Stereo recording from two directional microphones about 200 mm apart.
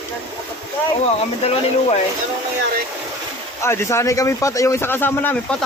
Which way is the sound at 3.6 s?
15° left (ahead or behind).